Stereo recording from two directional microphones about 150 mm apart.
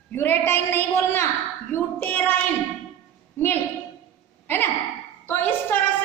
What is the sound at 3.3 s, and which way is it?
Speech, 15° left (ahead or behind).